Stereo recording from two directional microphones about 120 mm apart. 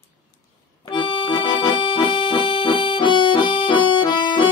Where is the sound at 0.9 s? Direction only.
45° left (ahead or behind).